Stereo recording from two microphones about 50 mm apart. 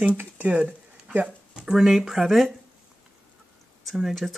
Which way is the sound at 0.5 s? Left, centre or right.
Right.